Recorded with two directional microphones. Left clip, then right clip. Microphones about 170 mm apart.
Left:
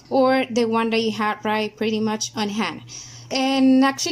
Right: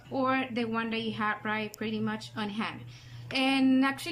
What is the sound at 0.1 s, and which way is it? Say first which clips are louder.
A woman's voice: left 11 dB; 50° left (ahead or behind).